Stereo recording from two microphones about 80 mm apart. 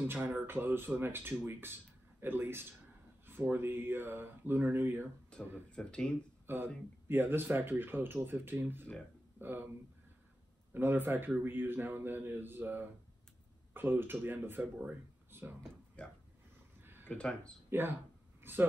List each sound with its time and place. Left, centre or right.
0.0 s speech: right
5.3 s speech: centre
6.4 s speech: right
10.7 s speech: right
16.0 s speech: centre
16.8 s a sound: right
17.1 s speech: centre
17.6 s speech: right